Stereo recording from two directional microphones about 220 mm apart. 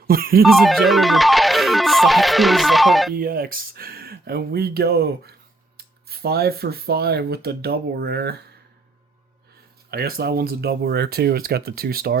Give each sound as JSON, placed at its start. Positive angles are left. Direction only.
{"t": 0.1, "sound": "speech", "side_deg": -40}
{"t": 0.4, "sound": "music", "side_deg": 0}
{"t": 3.2, "sound": "speech", "side_deg": -40}
{"t": 9.9, "sound": "speech", "side_deg": -45}